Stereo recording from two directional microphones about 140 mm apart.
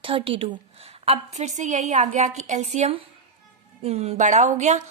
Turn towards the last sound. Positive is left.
turn(degrees=-55)  # may be behind; listen again after turning